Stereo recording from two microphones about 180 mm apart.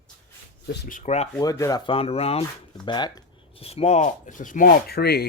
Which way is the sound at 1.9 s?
35° left (ahead or behind).